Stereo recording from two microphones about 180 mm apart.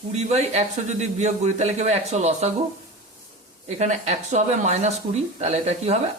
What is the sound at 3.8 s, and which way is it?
A man's voice, 40° right (ahead or behind).